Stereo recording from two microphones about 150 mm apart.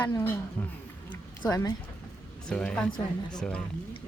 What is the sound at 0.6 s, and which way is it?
Speech, 15° left (ahead or behind).